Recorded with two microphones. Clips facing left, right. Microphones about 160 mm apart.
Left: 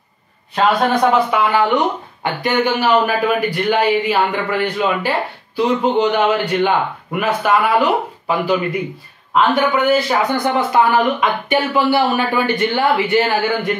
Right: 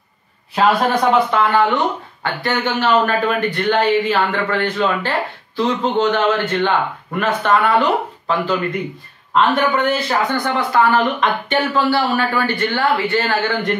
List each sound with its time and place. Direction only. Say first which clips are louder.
0.6 s speech: left 1 dB; centre (ahead or behind)
9.3 s speech: left 1 dB; 5° left (ahead or behind)
10.3 s speech: left 3 dB; 20° left (ahead or behind)